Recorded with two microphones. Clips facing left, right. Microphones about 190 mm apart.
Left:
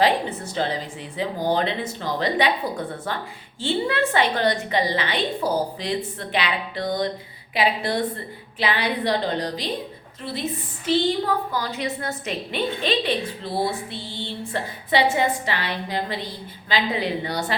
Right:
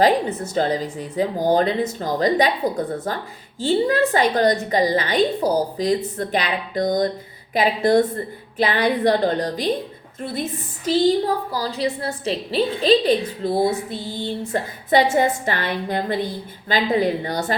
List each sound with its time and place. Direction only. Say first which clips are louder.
0.0 s a woman's voice: right 4 dB; 45° right (ahead or behind)